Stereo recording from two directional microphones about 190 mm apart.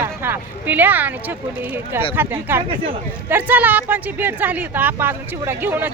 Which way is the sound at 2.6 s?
30° right (ahead or behind).